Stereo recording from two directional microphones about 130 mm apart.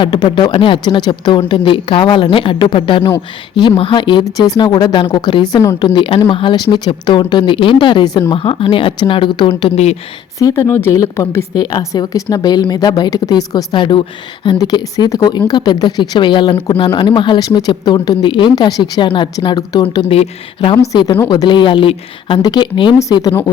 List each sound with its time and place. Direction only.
0.0 s speech: 35° left (ahead or behind)
8.3 s speech: 45° left (ahead or behind)
9.7 s speech: 55° left (ahead or behind)
10.3 s a woman's voice: 25° left (ahead or behind)
20.1 s speech: 45° left (ahead or behind)
20.9 s speech: 35° left (ahead or behind)
23.0 s a woman's voice: 25° left (ahead or behind)